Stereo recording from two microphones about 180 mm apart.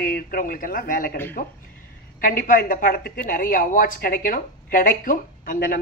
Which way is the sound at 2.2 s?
50° left (ahead or behind).